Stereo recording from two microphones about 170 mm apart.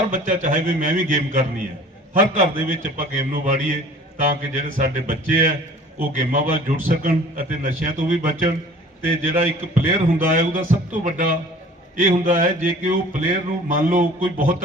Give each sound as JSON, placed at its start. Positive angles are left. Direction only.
{"t": 0.1, "sound": "a man's voice", "side_deg": -50}